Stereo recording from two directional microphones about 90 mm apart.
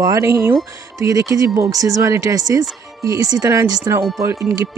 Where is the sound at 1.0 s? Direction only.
40° right (ahead or behind).